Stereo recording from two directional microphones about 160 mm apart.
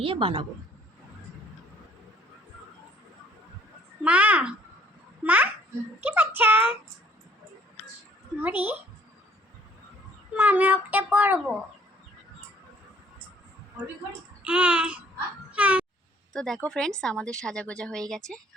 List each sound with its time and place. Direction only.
0.0 s a woman's voice: 35° right (ahead or behind)
4.0 s a child's voice: 10° right (ahead or behind)
8.4 s speech: 10° right (ahead or behind)
10.3 s speech: 10° right (ahead or behind)
14.4 s speech: 10° right (ahead or behind)
16.3 s a woman's voice: 5° left (ahead or behind)